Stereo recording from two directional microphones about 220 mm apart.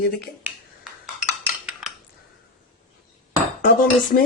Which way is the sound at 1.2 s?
5° right (ahead or behind).